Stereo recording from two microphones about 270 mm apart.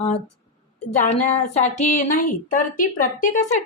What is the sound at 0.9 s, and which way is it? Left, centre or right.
A woman's voice, left.